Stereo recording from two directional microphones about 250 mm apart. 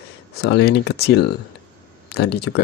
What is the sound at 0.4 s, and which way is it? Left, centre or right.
Speech, left.